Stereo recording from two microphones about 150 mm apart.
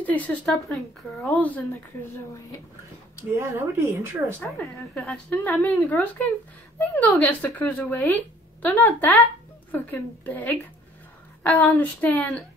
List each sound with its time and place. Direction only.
0.0 s a woman's voice: 10° left (ahead or behind)
3.3 s speech: 20° right (ahead or behind)
4.4 s a woman's voice: centre (ahead or behind)